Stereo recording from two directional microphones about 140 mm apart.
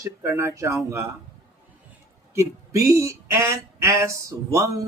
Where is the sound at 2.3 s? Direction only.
20° right (ahead or behind).